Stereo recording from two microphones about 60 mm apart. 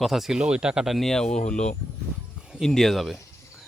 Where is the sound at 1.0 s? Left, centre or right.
Centre.